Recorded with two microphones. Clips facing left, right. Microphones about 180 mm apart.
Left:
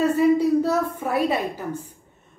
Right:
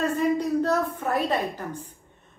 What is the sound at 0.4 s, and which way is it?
A woman's voice, 10° left (ahead or behind).